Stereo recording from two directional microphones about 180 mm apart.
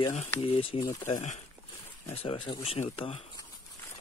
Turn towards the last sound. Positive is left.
turn(degrees=30)  # may be behind; listen again after turning